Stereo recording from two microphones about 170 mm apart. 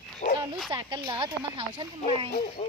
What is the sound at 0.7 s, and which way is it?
Speech, 25° right (ahead or behind).